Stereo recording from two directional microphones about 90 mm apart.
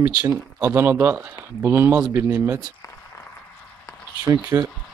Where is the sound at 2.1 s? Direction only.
30° right (ahead or behind).